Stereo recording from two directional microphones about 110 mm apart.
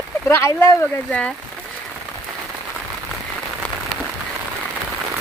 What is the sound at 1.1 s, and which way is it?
Speech, 10° left (ahead or behind).